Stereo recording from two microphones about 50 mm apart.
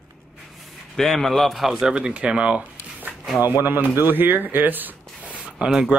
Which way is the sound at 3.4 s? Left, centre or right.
Right.